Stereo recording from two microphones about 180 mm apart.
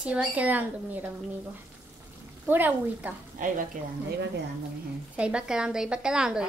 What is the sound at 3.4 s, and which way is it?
Speech, 45° right (ahead or behind).